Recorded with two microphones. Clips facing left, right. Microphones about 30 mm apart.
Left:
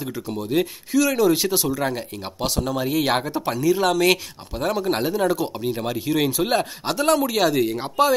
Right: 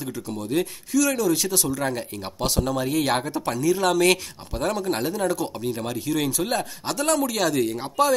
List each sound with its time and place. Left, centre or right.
0.0 s speech: centre